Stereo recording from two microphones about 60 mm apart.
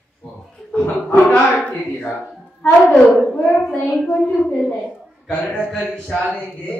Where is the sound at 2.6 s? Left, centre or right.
Left.